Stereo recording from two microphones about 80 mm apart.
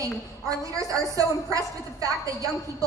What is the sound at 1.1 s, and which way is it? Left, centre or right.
A woman's voice, right.